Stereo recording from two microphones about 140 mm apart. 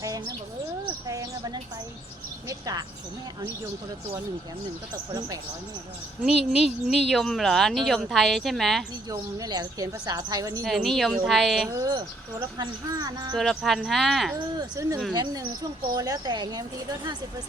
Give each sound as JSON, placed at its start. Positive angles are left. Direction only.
{"t": 1.0, "sound": "a sound", "side_deg": -25}
{"t": 2.5, "sound": "speech", "side_deg": -25}
{"t": 6.2, "sound": "speech", "side_deg": -5}
{"t": 9.0, "sound": "speech", "side_deg": -25}
{"t": 10.6, "sound": "speech", "side_deg": 0}
{"t": 11.7, "sound": "speech", "side_deg": -25}
{"t": 13.3, "sound": "speech", "side_deg": 0}
{"t": 14.8, "sound": "speech", "side_deg": -25}